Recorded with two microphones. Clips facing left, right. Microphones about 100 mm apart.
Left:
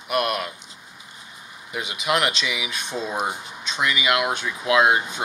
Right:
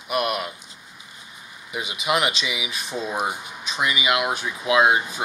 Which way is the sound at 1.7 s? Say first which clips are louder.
Even; centre (ahead or behind).